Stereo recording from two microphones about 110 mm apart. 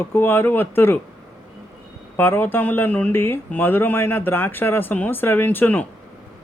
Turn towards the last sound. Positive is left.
turn(degrees=15)  # may be behind; listen again after turning